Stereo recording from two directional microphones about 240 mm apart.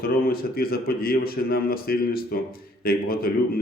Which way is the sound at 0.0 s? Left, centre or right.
Left.